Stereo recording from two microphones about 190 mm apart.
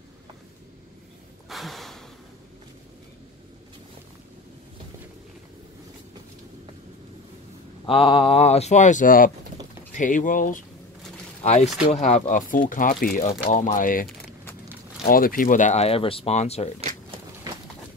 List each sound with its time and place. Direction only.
1.5 s a sound: centre (ahead or behind)
7.8 s speech: 30° left (ahead or behind); by 14.0 s 45° left (ahead or behind)
15.0 s speech: 45° left (ahead or behind)